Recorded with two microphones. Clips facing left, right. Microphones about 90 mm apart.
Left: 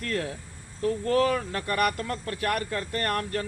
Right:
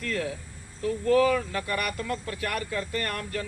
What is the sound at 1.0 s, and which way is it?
Speech, 45° left (ahead or behind).